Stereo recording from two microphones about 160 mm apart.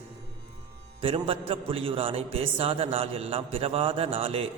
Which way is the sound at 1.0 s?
35° right (ahead or behind).